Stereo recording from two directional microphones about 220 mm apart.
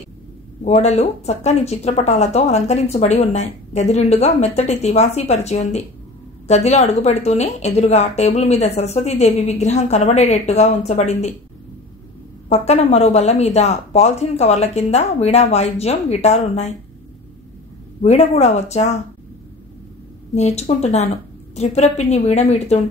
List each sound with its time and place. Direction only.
0.7 s speech: 30° left (ahead or behind)
12.4 s speech: 30° left (ahead or behind)
18.0 s speech: 30° left (ahead or behind)
20.3 s speech: 30° left (ahead or behind)